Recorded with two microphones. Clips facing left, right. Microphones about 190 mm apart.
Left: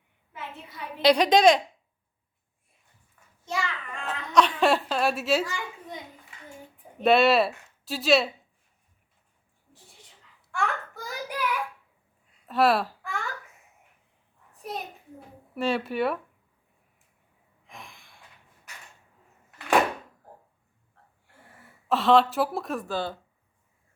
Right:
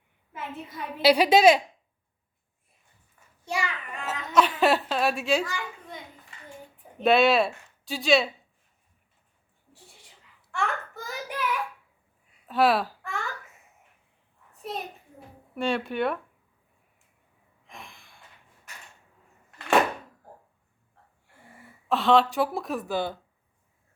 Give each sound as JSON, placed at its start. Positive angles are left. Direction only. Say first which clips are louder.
{"t": 1.0, "sound": "a woman's voice", "louder": "right 1 dB", "side_deg": -5}
{"t": 3.4, "sound": "child singing", "louder": "right 1 dB", "side_deg": -15}
{"t": 4.3, "sound": "speech", "louder": "even", "side_deg": -5}
{"t": 7.0, "sound": "speech", "louder": "even", "side_deg": 0}
{"t": 10.5, "sound": "a sound", "louder": "even", "side_deg": 0}
{"t": 12.5, "sound": "baby cry", "louder": "even", "side_deg": 0}
{"t": 15.5, "sound": "speech", "louder": "left 1 dB", "side_deg": 0}
{"t": 21.8, "sound": "speech", "louder": "left 1 dB", "side_deg": 0}
{"t": 22.9, "sound": "a woman's voice", "louder": "right 4 dB", "side_deg": -15}